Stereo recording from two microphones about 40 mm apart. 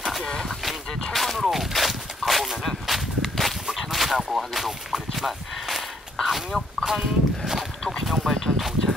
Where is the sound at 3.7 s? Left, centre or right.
Centre.